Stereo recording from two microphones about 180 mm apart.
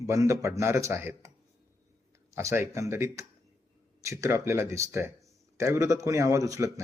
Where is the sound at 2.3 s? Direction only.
15° right (ahead or behind).